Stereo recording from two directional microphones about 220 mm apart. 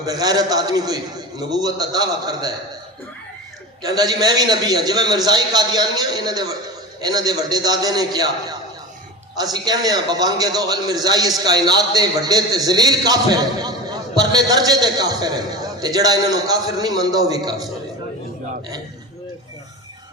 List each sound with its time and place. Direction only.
0.0 s a man's voice: 15° right (ahead or behind)
3.8 s a man's voice: 15° right (ahead or behind)